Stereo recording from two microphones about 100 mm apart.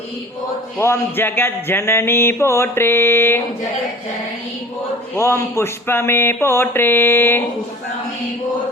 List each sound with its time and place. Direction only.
0.8 s music: 25° left (ahead or behind)
5.1 s music: 25° left (ahead or behind)